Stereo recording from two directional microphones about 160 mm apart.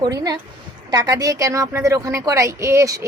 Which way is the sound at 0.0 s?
25° right (ahead or behind).